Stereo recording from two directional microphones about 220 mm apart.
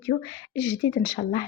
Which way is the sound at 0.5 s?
15° left (ahead or behind).